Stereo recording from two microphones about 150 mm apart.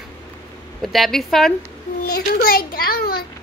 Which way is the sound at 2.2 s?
90° left.